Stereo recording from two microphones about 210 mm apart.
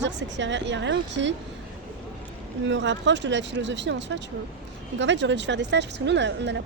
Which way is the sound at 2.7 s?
60° right (ahead or behind).